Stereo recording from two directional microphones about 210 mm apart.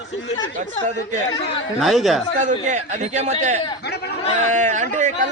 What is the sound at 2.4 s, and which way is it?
A man's voice, 35° right (ahead or behind).